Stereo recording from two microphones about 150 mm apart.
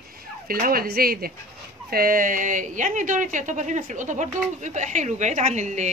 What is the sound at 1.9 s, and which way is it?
A woman's voice, 75° right (ahead or behind).